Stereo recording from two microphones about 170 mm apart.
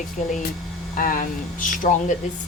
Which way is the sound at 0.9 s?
55° left (ahead or behind).